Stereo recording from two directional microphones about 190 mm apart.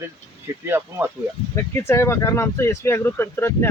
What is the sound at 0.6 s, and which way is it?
Speech, 10° right (ahead or behind).